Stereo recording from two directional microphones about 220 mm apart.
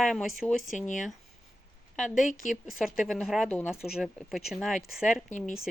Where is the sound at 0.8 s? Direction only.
35° left (ahead or behind).